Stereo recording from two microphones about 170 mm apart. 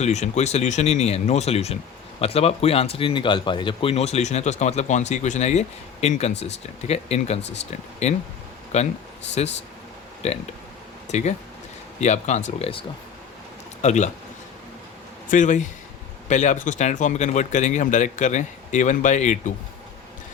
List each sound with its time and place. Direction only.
0.0 s speech: 40° left (ahead or behind)
13.8 s speech: 45° left (ahead or behind)
15.3 s speech: 45° left (ahead or behind)